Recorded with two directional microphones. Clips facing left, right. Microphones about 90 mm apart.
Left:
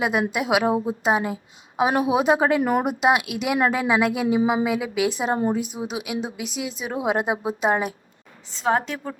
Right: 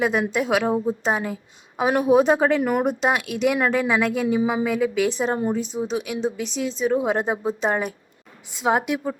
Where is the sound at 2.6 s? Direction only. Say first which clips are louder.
Left 1 dB; 25° left (ahead or behind).